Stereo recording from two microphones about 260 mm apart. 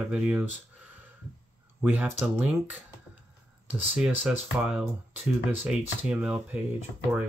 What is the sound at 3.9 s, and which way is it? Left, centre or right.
Speech, centre.